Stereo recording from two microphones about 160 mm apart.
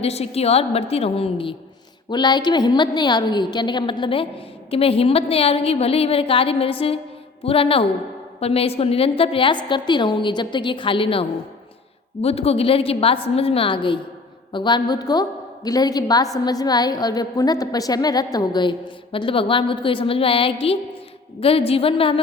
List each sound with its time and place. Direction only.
0.0 s a woman's voice: 40° left (ahead or behind)